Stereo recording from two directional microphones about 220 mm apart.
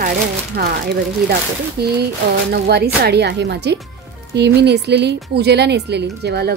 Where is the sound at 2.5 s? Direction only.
45° right (ahead or behind).